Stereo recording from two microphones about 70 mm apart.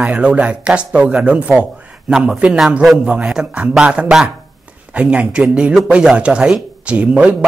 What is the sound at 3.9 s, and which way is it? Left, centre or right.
A man's voice, centre.